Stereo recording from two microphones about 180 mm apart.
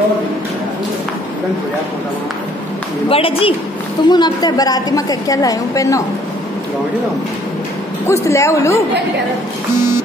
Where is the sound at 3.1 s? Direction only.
30° left (ahead or behind).